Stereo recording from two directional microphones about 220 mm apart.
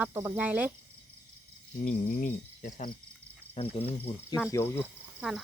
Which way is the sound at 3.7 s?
25° left (ahead or behind).